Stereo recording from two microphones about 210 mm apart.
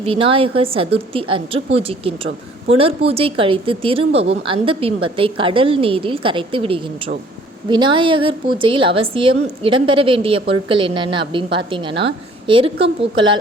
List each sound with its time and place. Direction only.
0.0 s speech: 25° right (ahead or behind)